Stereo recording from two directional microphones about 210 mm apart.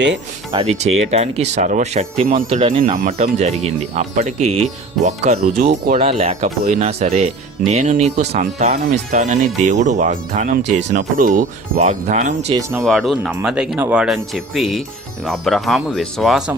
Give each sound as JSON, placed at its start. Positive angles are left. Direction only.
{"t": 0.5, "sound": "speech", "side_deg": -30}
{"t": 12.8, "sound": "speech", "side_deg": 0}